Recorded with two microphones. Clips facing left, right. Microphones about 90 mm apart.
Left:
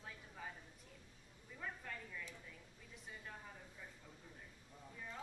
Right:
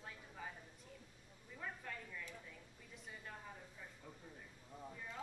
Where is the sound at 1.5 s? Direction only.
Centre (ahead or behind).